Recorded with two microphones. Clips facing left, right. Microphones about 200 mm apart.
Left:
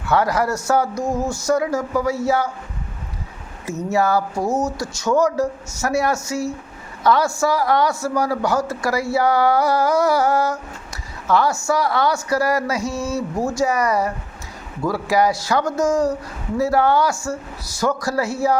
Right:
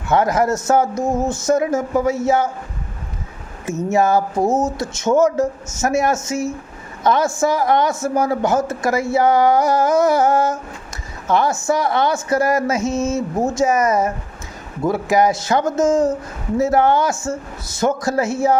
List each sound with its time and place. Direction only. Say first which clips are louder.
0.1 s speech: right 3 dB; 20° right (ahead or behind)
3.8 s a woman's voice: right 3 dB; 20° right (ahead or behind)